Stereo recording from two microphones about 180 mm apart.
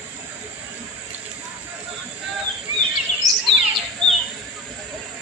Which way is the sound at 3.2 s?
20° left (ahead or behind).